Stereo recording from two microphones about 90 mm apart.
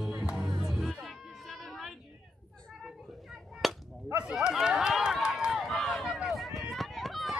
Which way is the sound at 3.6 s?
Centre (ahead or behind).